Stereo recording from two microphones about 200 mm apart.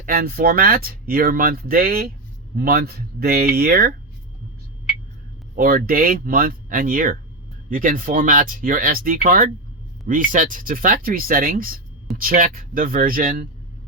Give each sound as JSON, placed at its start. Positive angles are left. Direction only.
{"t": 0.0, "sound": "speech", "side_deg": -45}
{"t": 5.5, "sound": "speech", "side_deg": -45}